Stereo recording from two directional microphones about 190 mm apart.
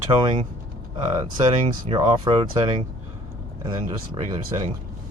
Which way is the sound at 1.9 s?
30° right (ahead or behind).